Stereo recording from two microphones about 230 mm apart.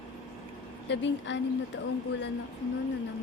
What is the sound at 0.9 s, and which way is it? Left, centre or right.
Speech, left.